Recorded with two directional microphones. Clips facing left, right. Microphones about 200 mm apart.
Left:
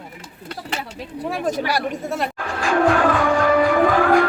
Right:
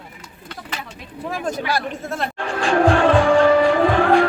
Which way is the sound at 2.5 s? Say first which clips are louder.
Right 1 dB; 30° right (ahead or behind).